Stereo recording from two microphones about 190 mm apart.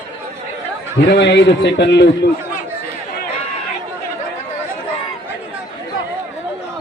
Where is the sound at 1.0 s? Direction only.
70° left (ahead or behind).